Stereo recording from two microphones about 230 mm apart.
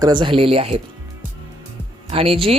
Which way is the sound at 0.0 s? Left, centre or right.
Right.